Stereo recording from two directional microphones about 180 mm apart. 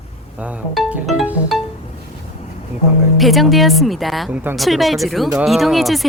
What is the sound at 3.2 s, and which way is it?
Speech, centre (ahead or behind).